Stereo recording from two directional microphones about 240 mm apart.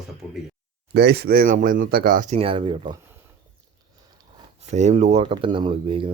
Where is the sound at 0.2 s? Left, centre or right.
Centre.